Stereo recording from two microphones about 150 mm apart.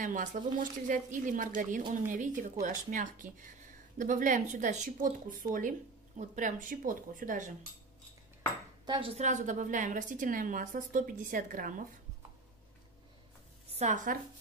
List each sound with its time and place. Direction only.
0.0 s speech: 60° right (ahead or behind)
8.8 s speech: 35° right (ahead or behind); by 11.8 s 65° right (ahead or behind)
13.7 s speech: 55° right (ahead or behind)